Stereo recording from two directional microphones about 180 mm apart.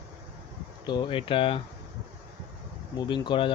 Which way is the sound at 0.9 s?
25° left (ahead or behind).